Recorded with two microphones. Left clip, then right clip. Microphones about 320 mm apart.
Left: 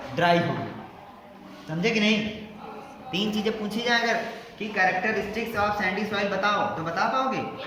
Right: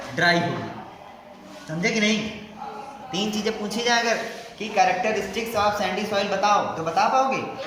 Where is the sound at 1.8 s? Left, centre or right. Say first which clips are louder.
Right 1 dB; centre.